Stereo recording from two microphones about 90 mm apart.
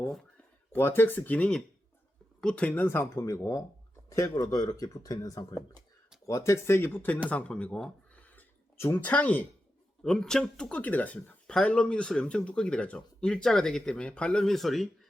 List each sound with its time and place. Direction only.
0.7 s speech: 25° left (ahead or behind)
10.0 s speech: 5° left (ahead or behind)